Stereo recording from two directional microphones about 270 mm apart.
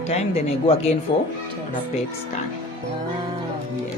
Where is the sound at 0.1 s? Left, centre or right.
Left.